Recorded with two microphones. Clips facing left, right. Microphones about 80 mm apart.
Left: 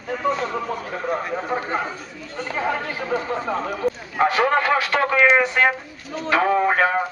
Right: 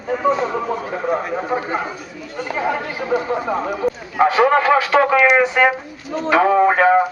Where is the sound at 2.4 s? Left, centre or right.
Centre.